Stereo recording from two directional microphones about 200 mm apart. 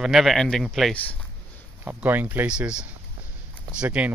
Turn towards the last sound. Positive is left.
turn(degrees=-5)  # may be behind; listen again after turning